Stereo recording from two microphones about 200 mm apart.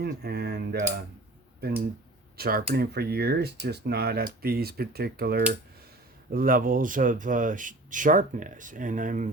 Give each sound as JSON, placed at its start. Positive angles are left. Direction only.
{"t": 0.0, "sound": "speech", "side_deg": -55}
{"t": 2.4, "sound": "speech", "side_deg": -50}